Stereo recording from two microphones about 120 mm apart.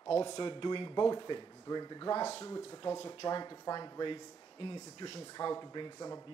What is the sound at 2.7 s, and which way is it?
Speech, 45° left (ahead or behind).